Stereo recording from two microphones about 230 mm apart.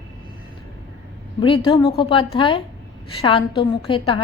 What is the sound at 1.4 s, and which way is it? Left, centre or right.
A woman's voice, left.